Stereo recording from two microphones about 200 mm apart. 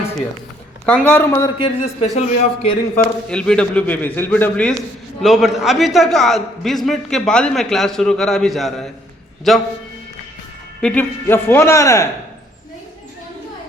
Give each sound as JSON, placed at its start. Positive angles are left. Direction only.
{"t": 0.9, "sound": "a man's voice", "side_deg": 10}
{"t": 1.6, "sound": "speech", "side_deg": 30}
{"t": 2.9, "sound": "a man's voice", "side_deg": 5}
{"t": 10.8, "sound": "a man's voice", "side_deg": 5}